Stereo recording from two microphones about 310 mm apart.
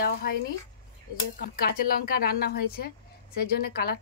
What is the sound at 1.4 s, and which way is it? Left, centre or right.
Speech, left.